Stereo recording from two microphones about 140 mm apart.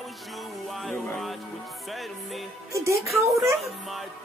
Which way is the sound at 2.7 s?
20° right (ahead or behind).